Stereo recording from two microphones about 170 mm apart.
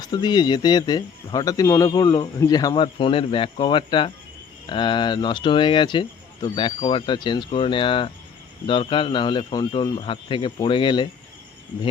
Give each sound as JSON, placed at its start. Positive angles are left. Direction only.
{"t": 0.0, "sound": "speech", "side_deg": 25}